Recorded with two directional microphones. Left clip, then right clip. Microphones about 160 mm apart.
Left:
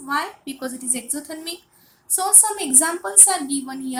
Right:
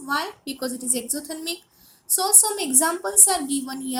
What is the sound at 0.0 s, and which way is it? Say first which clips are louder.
A woman's voice: left 2 dB; 55° right (ahead or behind).